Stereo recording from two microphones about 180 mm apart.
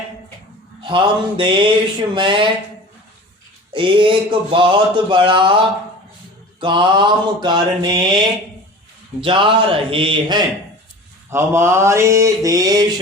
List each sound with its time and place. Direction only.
0.8 s speech: 30° right (ahead or behind)
3.7 s speech: 25° right (ahead or behind)
6.6 s speech: 25° right (ahead or behind)
11.3 s mantra: 15° right (ahead or behind)